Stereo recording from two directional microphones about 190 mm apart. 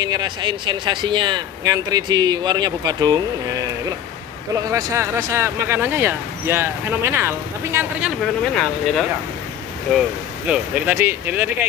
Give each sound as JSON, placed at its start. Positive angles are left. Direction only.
{"t": 0.0, "sound": "speech", "side_deg": -20}
{"t": 4.6, "sound": "speech", "side_deg": -15}
{"t": 8.2, "sound": "speech", "side_deg": 5}